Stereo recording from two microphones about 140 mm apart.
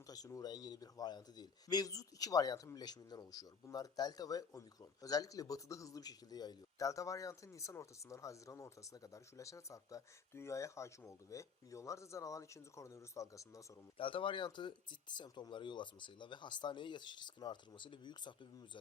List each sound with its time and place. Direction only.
0.1 s speech: 25° left (ahead or behind)
14.0 s speech: 40° left (ahead or behind)